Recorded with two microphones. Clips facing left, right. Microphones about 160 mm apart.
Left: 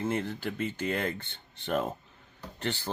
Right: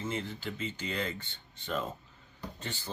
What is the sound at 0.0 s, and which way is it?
Speech, 55° left (ahead or behind).